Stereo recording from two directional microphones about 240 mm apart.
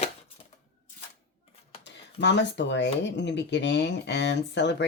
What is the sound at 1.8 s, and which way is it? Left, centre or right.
Speech, left.